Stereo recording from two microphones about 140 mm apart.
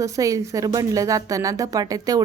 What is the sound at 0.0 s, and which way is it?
Speech, 25° right (ahead or behind).